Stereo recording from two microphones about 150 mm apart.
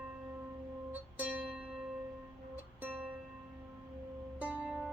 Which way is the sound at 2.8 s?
10° right (ahead or behind).